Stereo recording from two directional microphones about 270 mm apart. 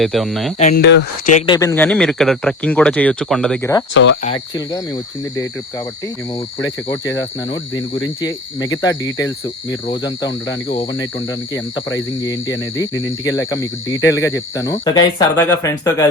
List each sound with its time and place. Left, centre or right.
0.0 s speech: centre
0.6 s speech: left
1.5 s speech: centre
3.9 s speech: left
6.6 s cricket: centre
11.9 s cricket: centre